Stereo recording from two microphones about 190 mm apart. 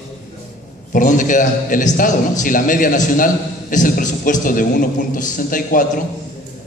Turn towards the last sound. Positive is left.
turn(degrees=45)  # may be behind; listen again after turning